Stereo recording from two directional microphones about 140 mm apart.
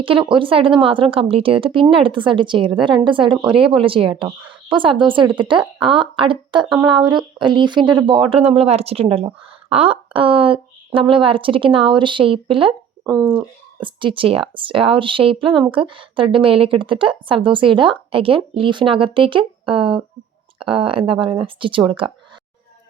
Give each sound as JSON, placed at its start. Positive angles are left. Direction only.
{"t": 0.0, "sound": "speech", "side_deg": -40}
{"t": 13.1, "sound": "speech", "side_deg": 10}
{"t": 13.8, "sound": "speech", "side_deg": -35}